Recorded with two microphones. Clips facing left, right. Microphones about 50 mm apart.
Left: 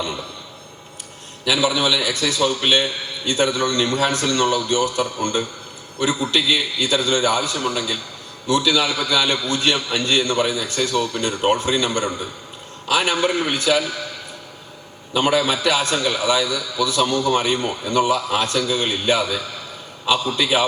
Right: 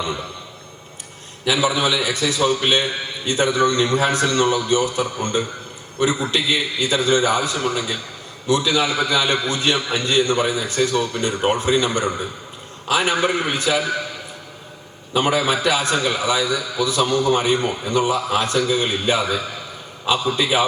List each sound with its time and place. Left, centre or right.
0.0 s a man's voice: right
1.5 s a man's voice: right
15.2 s a man's voice: right